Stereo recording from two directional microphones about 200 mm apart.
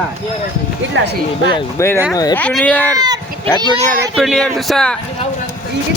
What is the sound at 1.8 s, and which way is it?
Speech, 15° left (ahead or behind).